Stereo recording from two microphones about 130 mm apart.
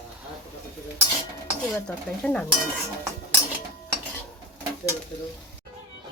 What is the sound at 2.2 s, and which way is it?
Speech, 5° left (ahead or behind).